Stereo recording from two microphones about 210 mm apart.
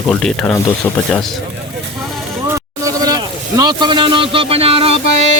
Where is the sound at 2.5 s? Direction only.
15° right (ahead or behind).